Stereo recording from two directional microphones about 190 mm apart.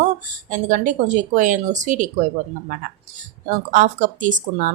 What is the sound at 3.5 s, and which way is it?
Speech, 45° right (ahead or behind).